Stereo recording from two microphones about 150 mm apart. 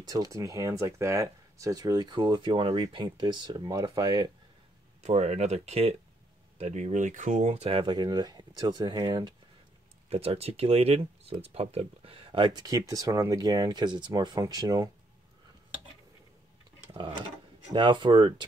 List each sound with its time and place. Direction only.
0.0 s speech: 25° right (ahead or behind)
5.0 s speech: 50° right (ahead or behind); by 9.3 s 30° right (ahead or behind)
10.0 s speech: 40° right (ahead or behind); by 14.9 s 25° right (ahead or behind)
17.7 s speech: 30° right (ahead or behind)